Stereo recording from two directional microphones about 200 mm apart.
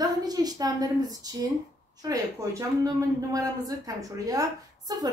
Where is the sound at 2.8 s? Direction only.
15° right (ahead or behind).